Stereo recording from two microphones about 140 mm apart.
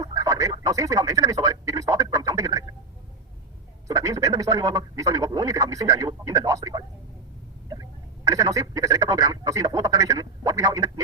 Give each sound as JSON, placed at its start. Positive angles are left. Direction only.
{"t": 0.0, "sound": "speech", "side_deg": -25}
{"t": 3.8, "sound": "speech", "side_deg": -25}